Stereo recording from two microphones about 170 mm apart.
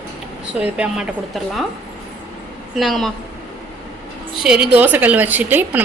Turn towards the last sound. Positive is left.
turn(degrees=-10)  # may be behind; listen again after turning